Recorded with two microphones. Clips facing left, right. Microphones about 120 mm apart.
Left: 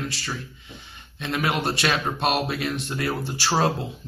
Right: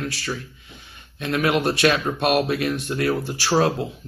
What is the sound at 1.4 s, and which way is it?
Speech, 55° right (ahead or behind).